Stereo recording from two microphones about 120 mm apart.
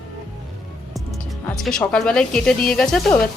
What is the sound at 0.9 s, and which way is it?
Speech, centre (ahead or behind).